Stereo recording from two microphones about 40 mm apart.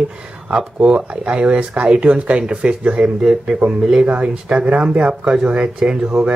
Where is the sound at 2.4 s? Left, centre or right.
Right.